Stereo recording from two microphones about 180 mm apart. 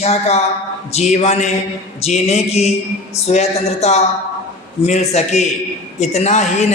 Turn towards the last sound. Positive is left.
turn(degrees=40)  # may be behind; listen again after turning